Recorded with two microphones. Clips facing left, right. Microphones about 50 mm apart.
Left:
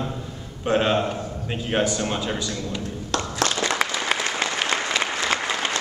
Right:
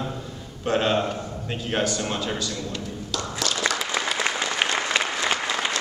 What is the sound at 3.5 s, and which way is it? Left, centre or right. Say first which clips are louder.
Applause: right 2 dB; left.